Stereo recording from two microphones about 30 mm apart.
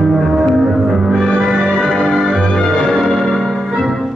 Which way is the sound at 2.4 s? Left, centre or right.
Left.